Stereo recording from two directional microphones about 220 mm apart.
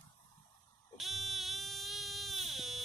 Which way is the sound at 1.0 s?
Centre (ahead or behind).